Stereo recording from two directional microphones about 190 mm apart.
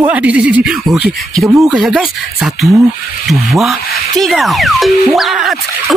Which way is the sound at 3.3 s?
Centre (ahead or behind).